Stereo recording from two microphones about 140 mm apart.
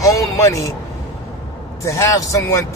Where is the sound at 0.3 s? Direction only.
20° left (ahead or behind).